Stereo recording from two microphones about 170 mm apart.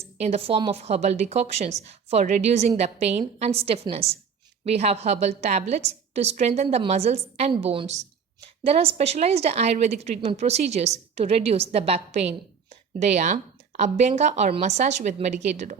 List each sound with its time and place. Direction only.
0.2 s a woman's voice: 35° right (ahead or behind)